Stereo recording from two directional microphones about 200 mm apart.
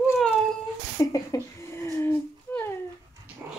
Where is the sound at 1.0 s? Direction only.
15° left (ahead or behind).